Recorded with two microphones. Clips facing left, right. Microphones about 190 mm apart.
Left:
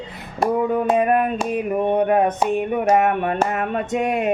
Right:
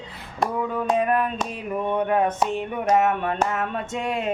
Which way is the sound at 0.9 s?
55° left (ahead or behind).